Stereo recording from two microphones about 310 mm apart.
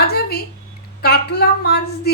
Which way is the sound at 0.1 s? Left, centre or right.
Left.